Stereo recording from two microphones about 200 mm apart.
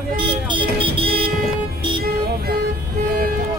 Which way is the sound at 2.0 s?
50° right (ahead or behind).